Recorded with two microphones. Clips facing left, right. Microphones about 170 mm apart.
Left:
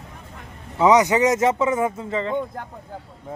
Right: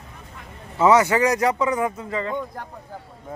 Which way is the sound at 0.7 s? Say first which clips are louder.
Left 1 dB; 15° left (ahead or behind).